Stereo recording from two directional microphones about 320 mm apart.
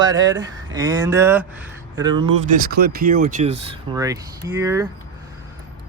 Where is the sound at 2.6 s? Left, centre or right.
Right; by 4.8 s centre.